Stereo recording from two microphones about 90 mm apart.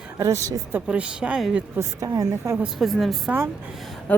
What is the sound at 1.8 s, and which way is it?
Speech, 40° right (ahead or behind).